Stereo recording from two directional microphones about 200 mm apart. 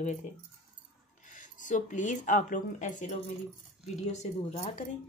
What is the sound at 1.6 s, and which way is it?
Speech, 40° left (ahead or behind).